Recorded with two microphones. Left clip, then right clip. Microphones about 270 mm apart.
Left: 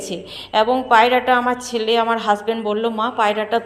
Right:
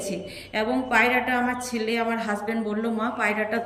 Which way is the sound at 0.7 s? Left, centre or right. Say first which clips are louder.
Left 6 dB; centre.